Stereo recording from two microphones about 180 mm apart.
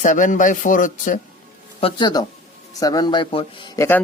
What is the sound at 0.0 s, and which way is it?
Speech, 45° left (ahead or behind).